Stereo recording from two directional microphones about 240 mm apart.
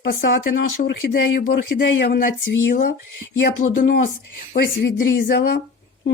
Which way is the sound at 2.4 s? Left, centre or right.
Left.